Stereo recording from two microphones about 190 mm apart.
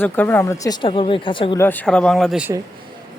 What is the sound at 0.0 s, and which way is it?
Speech, 10° left (ahead or behind).